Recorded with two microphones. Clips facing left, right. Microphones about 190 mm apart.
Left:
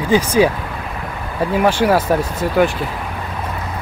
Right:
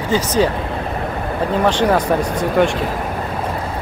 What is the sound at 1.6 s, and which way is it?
Speech, 10° left (ahead or behind).